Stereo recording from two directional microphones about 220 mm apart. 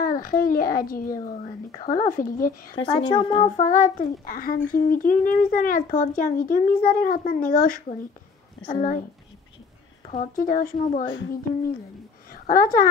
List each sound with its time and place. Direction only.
0.0 s a child's voice: 40° left (ahead or behind)
2.8 s a child's voice: 20° left (ahead or behind); by 9.0 s 40° left (ahead or behind)
10.0 s a child's voice: 35° left (ahead or behind)
12.3 s a woman's voice: 40° left (ahead or behind)